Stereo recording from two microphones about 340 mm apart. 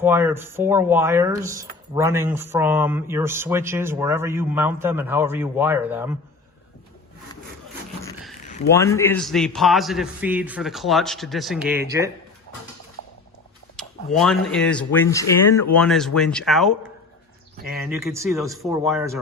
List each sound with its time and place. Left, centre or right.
0.0 s speech: centre
8.0 s a sound: centre
8.4 s a sound: left
8.7 s a man's voice: centre
13.7 s a man's voice: centre
17.9 s speech: centre